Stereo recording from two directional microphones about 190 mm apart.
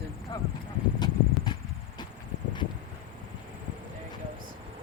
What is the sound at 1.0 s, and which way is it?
Horse, 20° left (ahead or behind).